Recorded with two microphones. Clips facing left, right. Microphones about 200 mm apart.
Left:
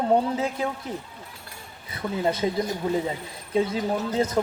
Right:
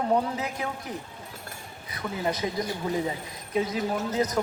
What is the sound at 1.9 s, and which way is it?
Speech, 25° left (ahead or behind).